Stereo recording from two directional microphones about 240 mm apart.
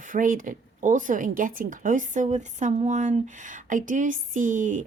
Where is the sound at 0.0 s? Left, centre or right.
Right.